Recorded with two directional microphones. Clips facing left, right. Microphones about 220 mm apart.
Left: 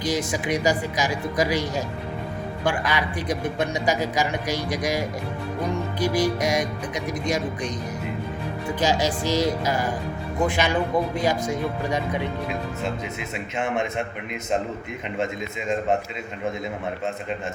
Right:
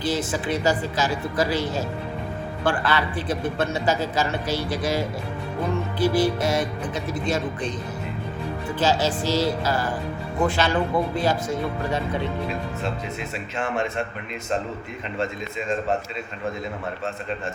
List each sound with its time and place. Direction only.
0.0 s a man's voice: 15° left (ahead or behind)
8.8 s a man's voice: 15° left (ahead or behind)
13.6 s speech: 20° left (ahead or behind)